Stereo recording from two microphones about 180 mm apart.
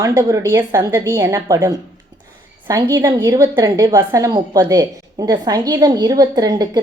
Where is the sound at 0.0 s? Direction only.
15° right (ahead or behind).